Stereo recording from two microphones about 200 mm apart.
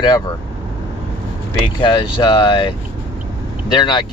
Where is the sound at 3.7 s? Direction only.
20° left (ahead or behind).